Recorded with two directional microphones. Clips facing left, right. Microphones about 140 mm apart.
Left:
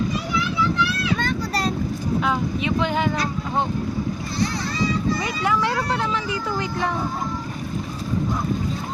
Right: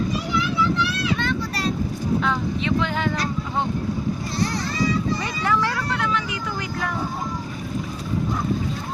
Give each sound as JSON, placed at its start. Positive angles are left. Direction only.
{"t": 1.2, "sound": "vehicle", "side_deg": 40}
{"t": 2.2, "sound": "vehicle", "side_deg": 15}
{"t": 5.4, "sound": "speech", "side_deg": 10}
{"t": 5.7, "sound": "speech", "side_deg": 30}